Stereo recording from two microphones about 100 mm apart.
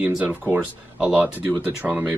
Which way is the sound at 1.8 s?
10° right (ahead or behind).